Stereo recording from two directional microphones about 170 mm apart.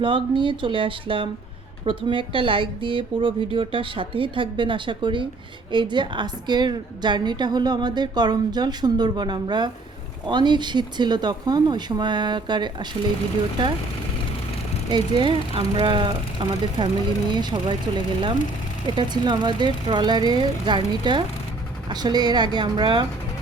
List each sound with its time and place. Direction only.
0.0 s a woman's voice: 30° right (ahead or behind)
14.8 s a woman's voice: 25° right (ahead or behind)
18.9 s a woman's voice: 25° right (ahead or behind)